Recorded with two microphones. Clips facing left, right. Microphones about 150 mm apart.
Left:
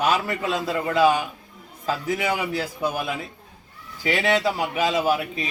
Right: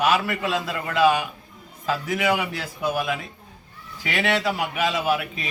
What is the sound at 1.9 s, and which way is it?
A man's voice, 30° left (ahead or behind).